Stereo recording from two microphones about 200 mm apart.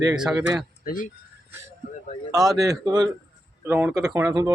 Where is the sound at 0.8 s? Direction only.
45° left (ahead or behind).